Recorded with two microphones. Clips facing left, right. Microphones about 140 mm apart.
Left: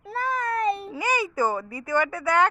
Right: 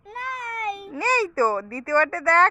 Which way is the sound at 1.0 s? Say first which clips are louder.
Right 6 dB; 15° left (ahead or behind).